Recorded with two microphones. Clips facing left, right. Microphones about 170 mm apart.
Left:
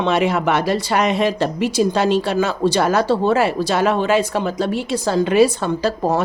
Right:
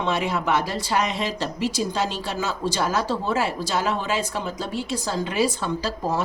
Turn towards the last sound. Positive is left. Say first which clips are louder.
# left 7 dB
turn(degrees=60)  # may be behind; listen again after turning